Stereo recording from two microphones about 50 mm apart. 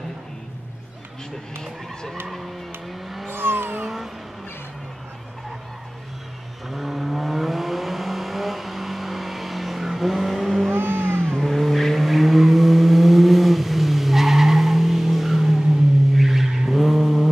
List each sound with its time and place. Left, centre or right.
2.2 s vehicle: centre
3.3 s vehicle: right
3.8 s vehicle: centre
6.7 s vehicle: centre
10.7 s vehicle: right
11.3 s vehicle: centre